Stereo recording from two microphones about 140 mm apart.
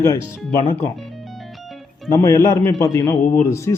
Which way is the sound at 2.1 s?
20° left (ahead or behind).